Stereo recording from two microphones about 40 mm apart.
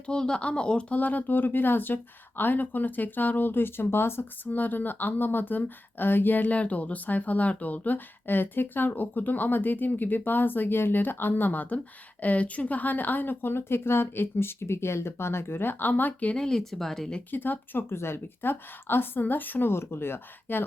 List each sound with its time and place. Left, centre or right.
0.0 s speech: left
0.9 s speech: left
4.4 s speech: left
11.5 s speech: left
16.3 s speech: centre
17.3 s speech: left
19.7 s speech: left